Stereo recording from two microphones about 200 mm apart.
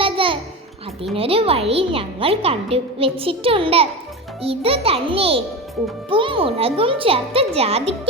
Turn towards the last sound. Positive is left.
turn(degrees=-30)  # may be behind; listen again after turning